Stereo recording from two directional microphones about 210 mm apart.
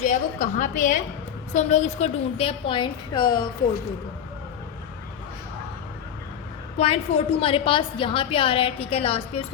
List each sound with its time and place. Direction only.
0.0 s a woman's voice: 35° left (ahead or behind)
6.7 s a woman's voice: 30° left (ahead or behind)